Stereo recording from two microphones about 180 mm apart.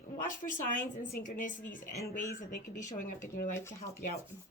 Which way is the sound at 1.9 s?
15° left (ahead or behind).